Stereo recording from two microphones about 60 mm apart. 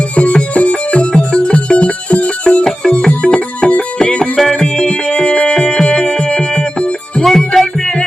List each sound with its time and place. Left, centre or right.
0.2 s music: left
7.3 s music: centre